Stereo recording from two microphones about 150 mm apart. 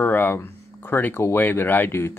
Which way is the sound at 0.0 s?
15° left (ahead or behind).